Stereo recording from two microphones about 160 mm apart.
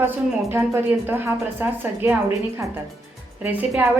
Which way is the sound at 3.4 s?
5° right (ahead or behind).